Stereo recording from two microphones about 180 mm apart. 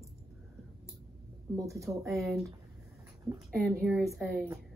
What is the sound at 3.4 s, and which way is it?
Speech, centre (ahead or behind).